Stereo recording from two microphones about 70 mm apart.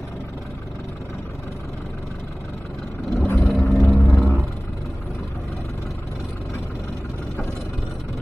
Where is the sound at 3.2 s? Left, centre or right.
Left.